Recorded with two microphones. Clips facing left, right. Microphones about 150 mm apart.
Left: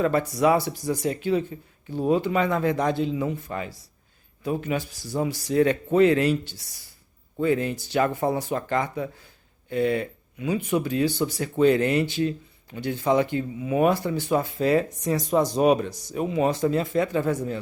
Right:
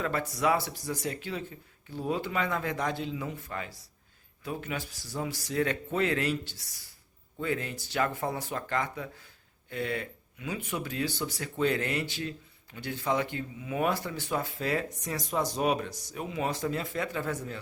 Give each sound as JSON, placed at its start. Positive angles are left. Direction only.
{"t": 0.0, "sound": "speech", "side_deg": 20}